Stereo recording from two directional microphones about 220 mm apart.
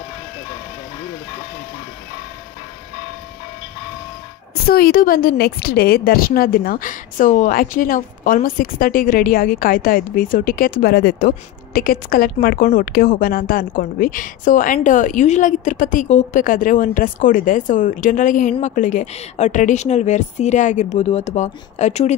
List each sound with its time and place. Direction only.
4.6 s a woman's voice: 45° left (ahead or behind)